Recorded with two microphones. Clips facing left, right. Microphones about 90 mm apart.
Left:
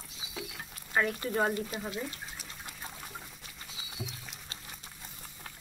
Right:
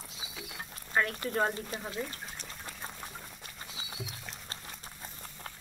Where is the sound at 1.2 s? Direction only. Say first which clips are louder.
Left 1 dB; 5° left (ahead or behind).